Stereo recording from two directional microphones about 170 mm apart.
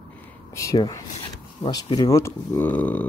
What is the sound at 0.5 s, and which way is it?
Speech, 20° left (ahead or behind).